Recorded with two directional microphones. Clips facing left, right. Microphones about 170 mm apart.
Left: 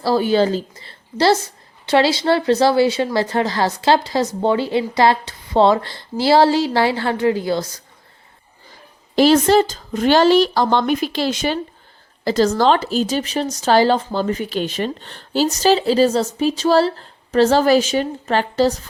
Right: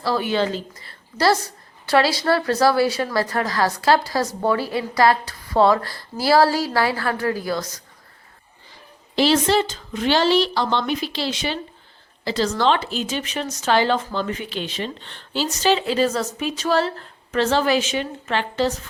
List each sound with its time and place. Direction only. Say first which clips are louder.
0.0 s speech: left 5 dB; 30° left (ahead or behind)
9.1 s speech: left 5 dB; 45° left (ahead or behind)